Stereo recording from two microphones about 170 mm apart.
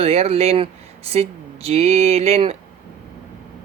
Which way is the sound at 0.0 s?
35° right (ahead or behind).